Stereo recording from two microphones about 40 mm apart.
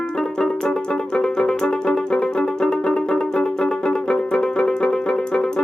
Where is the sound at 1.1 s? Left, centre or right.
Left.